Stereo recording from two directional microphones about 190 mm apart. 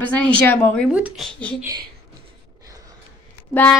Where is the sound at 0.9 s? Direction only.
5° right (ahead or behind).